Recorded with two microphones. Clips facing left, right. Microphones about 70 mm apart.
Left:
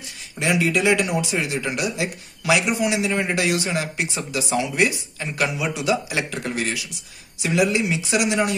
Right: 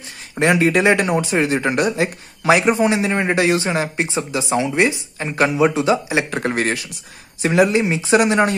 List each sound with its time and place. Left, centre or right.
0.4 s speech: right
6.3 s speech: right